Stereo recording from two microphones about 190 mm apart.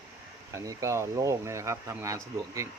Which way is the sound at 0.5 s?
15° right (ahead or behind).